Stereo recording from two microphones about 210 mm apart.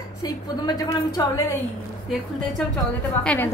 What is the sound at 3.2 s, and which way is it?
Speech, 5° left (ahead or behind).